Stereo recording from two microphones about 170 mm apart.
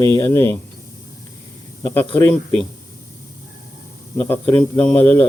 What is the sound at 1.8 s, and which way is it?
Speech, 15° left (ahead or behind).